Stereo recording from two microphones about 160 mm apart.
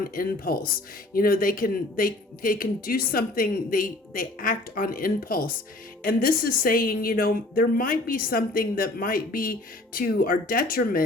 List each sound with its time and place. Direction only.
0.0 s a woman's voice: 65° left (ahead or behind)